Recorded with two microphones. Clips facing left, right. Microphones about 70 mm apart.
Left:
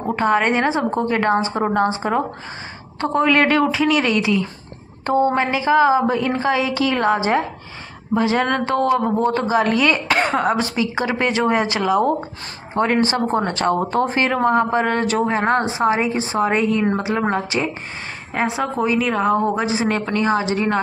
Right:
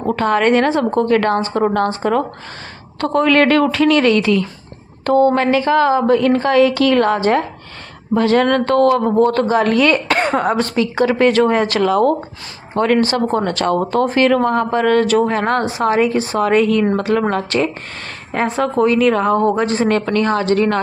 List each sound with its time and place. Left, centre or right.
0.1 s speech: centre
18.3 s speech: centre